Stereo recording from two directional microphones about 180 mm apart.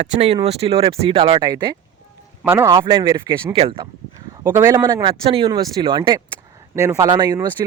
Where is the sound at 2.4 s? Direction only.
15° right (ahead or behind).